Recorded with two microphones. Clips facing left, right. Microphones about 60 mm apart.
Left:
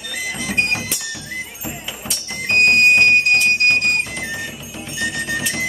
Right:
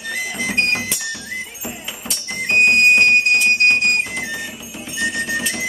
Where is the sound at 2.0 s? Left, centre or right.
Centre.